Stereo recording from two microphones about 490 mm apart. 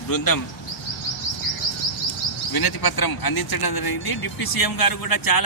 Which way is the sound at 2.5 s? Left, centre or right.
Left.